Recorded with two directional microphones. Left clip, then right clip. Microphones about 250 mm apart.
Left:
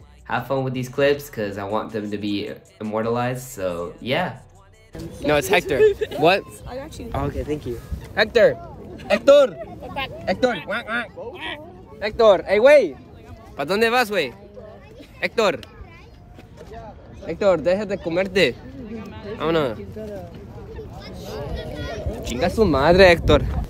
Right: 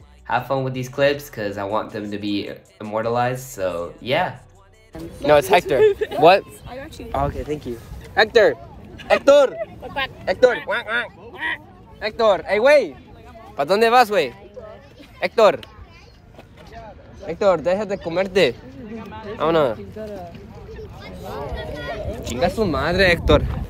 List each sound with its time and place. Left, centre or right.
0.3 s speech: centre
5.9 s speech: right
6.2 s speech: centre
7.4 s speech: centre
8.1 s speech: centre
12.0 s speech: centre
17.3 s speech: centre
18.9 s a sound: centre
19.3 s speech: centre
21.3 s a sound: centre
22.2 s a sound: centre
22.6 s speech: centre
23.1 s speech: centre